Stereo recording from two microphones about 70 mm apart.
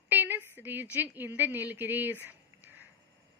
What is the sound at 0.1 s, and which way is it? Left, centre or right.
A woman's voice, right.